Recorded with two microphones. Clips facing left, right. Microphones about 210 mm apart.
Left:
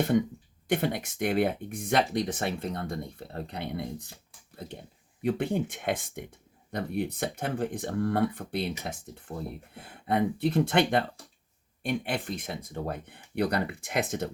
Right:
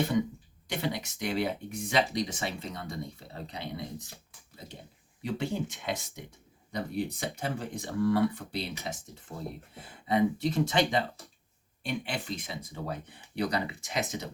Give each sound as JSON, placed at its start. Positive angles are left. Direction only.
{"t": 0.7, "sound": "speech", "side_deg": 55}
{"t": 5.2, "sound": "speech", "side_deg": 55}